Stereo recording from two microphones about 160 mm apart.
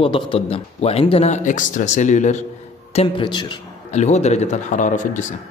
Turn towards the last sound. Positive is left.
turn(degrees=50)  # may be behind; listen again after turning